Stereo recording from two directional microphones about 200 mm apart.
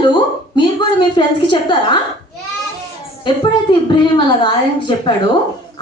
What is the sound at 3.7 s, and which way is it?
Speech, 25° left (ahead or behind).